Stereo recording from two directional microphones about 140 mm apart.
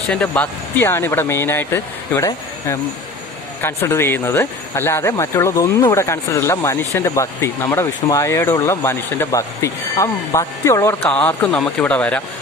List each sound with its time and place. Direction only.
0.1 s speech: 10° left (ahead or behind)
11.1 s speech: 10° left (ahead or behind)